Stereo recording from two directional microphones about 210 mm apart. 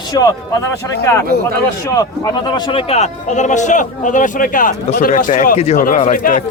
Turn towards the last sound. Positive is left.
turn(degrees=40)  # may be behind; listen again after turning